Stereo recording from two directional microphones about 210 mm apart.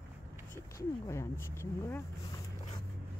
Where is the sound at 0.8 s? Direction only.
15° left (ahead or behind).